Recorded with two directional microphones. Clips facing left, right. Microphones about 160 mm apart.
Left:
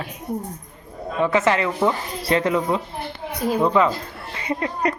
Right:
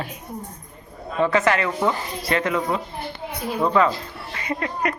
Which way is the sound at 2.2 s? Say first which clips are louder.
Left 4 dB; 30° left (ahead or behind).